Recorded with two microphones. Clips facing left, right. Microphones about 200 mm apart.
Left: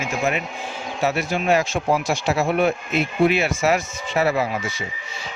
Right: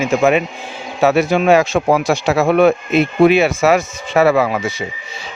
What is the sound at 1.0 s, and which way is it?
A man's voice, 70° right (ahead or behind).